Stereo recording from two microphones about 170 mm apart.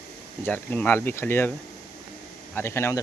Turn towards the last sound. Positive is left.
turn(degrees=15)  # may be behind; listen again after turning